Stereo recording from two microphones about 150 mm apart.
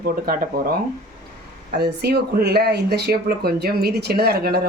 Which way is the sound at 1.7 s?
90° right.